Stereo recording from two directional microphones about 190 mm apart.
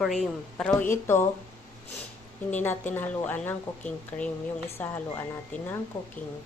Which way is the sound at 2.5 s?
10° left (ahead or behind).